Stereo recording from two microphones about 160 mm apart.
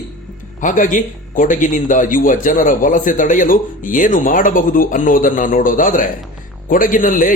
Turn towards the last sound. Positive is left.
turn(degrees=55)  # may be behind; listen again after turning